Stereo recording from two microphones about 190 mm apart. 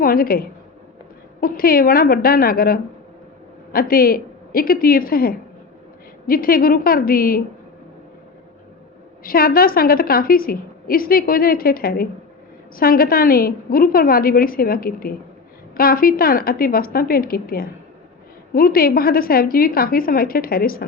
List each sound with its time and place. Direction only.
0.0 s a woman's voice: 50° left (ahead or behind)
9.2 s a woman's voice: 50° left (ahead or behind)